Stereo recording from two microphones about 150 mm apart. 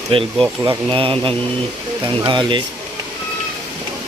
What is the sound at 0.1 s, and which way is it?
Speech, 35° right (ahead or behind).